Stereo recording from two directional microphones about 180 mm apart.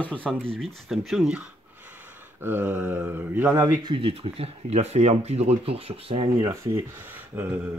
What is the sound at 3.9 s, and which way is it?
Speech, 30° right (ahead or behind).